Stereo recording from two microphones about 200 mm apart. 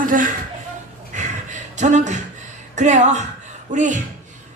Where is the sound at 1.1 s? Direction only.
35° right (ahead or behind).